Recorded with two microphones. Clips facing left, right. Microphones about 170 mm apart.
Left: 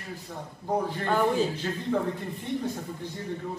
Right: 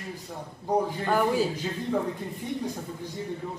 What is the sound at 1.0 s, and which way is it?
Speech, 5° right (ahead or behind).